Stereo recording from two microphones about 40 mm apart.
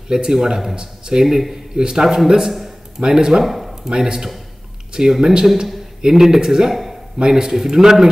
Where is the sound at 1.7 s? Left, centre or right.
Centre.